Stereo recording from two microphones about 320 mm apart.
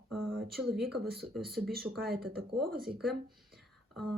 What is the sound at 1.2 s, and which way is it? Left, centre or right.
Speech, centre.